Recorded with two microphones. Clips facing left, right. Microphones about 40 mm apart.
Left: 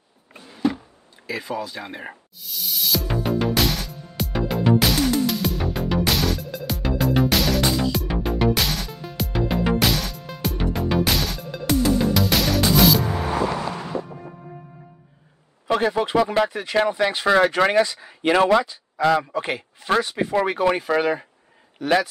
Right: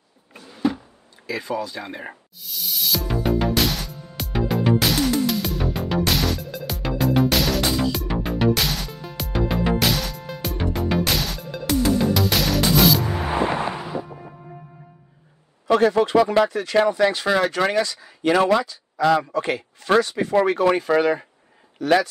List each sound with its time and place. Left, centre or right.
0.5 s a sound: centre
1.2 s music: centre
13.3 s a sound: right
13.7 s music: centre
15.7 s speech: centre
21.8 s speech: centre